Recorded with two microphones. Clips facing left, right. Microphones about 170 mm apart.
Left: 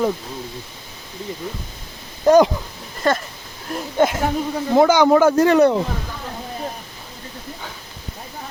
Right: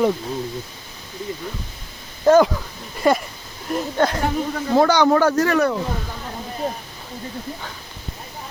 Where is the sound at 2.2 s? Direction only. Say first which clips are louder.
Left 1 dB; 15° left (ahead or behind).